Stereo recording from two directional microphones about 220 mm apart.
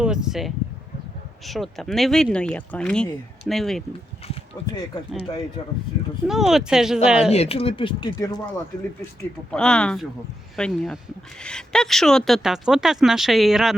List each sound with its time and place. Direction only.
0.0 s speech: 5° right (ahead or behind)
6.2 s speech: centre (ahead or behind)
7.3 s speech: 25° left (ahead or behind)
9.5 s speech: 5° left (ahead or behind)